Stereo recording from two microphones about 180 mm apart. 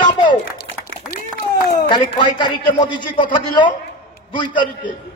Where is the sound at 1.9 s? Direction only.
25° left (ahead or behind).